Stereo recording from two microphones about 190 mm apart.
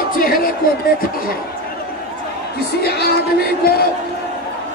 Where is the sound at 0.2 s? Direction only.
50° left (ahead or behind).